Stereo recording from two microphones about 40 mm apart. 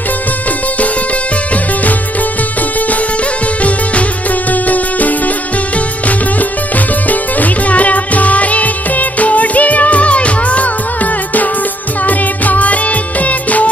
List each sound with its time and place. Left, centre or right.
4.5 s music: left
7.1 s music: left
12.1 s music: left